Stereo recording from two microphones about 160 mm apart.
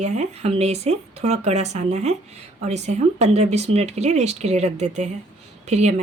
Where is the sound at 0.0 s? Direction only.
45° right (ahead or behind).